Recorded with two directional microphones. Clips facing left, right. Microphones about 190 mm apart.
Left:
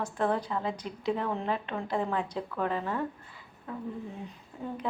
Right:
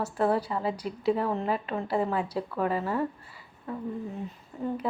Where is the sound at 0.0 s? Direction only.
10° right (ahead or behind).